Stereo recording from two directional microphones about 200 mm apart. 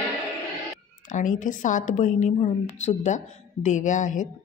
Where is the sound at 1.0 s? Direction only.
40° left (ahead or behind).